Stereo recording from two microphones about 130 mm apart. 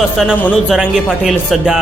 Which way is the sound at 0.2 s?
5° right (ahead or behind).